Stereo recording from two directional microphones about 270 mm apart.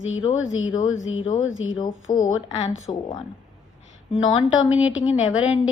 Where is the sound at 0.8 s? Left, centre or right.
Left.